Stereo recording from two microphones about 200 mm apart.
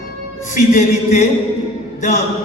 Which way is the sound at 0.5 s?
35° left (ahead or behind).